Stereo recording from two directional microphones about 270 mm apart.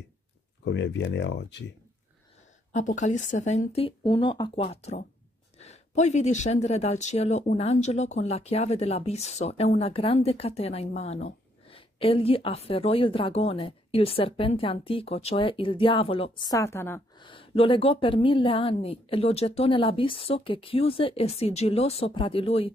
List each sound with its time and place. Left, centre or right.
0.7 s speech: left
2.7 s speech: left